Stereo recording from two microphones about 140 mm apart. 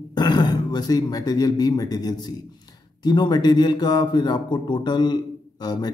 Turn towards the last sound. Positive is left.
turn(degrees=30)  # may be behind; listen again after turning